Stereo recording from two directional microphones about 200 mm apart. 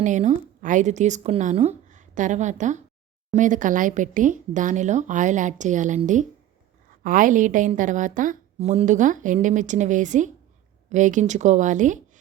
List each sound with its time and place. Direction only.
0.0 s a woman's voice: 35° right (ahead or behind)